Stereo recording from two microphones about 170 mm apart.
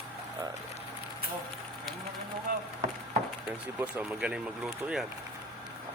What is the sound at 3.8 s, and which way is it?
Speech, 10° right (ahead or behind).